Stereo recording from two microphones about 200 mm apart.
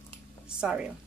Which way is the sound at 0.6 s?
5° right (ahead or behind).